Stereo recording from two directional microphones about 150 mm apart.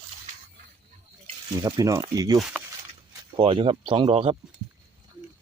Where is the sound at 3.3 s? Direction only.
40° right (ahead or behind).